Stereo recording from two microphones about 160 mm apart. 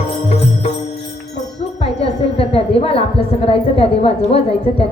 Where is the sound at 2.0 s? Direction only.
35° left (ahead or behind).